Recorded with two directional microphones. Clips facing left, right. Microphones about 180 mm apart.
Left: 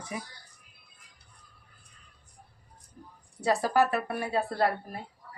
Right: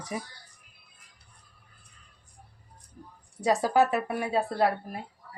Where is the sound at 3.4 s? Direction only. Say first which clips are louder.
Right 2 dB; 20° right (ahead or behind).